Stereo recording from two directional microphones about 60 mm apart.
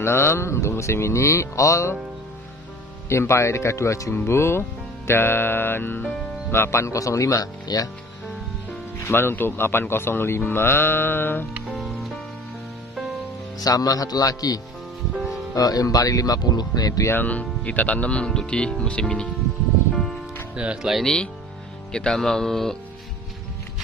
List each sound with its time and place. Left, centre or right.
0.0 s speech: left
3.1 s speech: left
4.1 s speech: left
6.5 s speech: left
9.0 s speech: left
11.7 s music: centre
13.6 s speech: left
15.1 s music: centre
15.5 s speech: left
17.1 s speech: left
20.5 s speech: centre
20.9 s speech: centre